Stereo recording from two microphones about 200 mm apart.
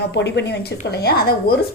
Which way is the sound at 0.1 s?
60° left (ahead or behind).